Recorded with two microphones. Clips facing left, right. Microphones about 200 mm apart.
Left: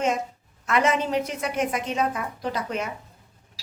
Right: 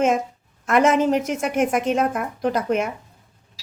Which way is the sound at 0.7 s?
45° right (ahead or behind).